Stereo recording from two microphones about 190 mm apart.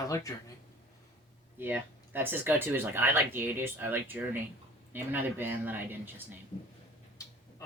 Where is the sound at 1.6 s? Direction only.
10° right (ahead or behind).